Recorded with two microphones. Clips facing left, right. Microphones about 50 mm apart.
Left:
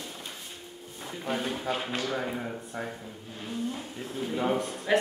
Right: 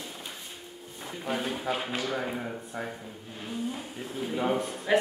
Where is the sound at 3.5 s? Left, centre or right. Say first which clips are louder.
Even; centre.